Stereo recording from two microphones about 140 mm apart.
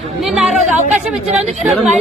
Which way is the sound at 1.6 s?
Centre (ahead or behind).